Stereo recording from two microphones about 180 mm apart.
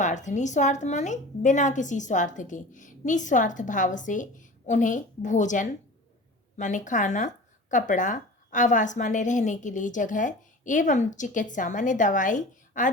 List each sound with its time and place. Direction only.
0.0 s a woman's voice: 40° left (ahead or behind)